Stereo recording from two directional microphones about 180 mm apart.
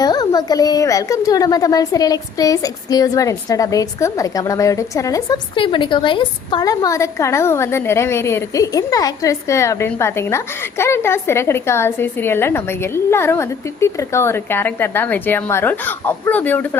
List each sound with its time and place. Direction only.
0.0 s a child's voice: 20° left (ahead or behind)